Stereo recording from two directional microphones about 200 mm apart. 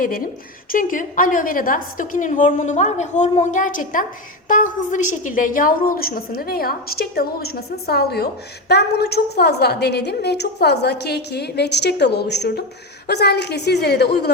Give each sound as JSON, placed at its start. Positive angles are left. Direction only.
{"t": 0.7, "sound": "a woman's voice", "side_deg": 40}